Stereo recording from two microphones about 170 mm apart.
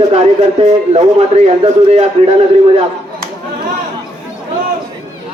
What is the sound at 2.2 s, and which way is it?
Speech, 35° right (ahead or behind).